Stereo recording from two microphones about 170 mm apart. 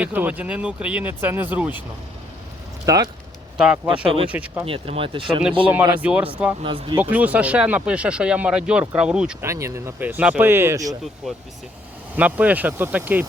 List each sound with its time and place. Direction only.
0.0 s speech: 10° right (ahead or behind)
2.8 s speech: 20° right (ahead or behind)
3.6 s speech: 5° right (ahead or behind)
3.9 s speech: 30° right (ahead or behind)
4.3 s speech: 10° right (ahead or behind)
4.6 s speech: 30° right (ahead or behind)
5.6 s speech: 10° right (ahead or behind)
6.6 s speech: 30° right (ahead or behind)
7.0 s speech: 10° right (ahead or behind)
9.5 s speech: 15° right (ahead or behind)
12.1 s speech: 10° right (ahead or behind)